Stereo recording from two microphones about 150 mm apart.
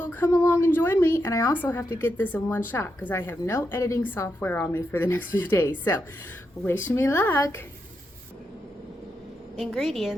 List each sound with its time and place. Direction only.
0.0 s a woman's voice: 15° left (ahead or behind)
9.6 s a woman's voice: centre (ahead or behind)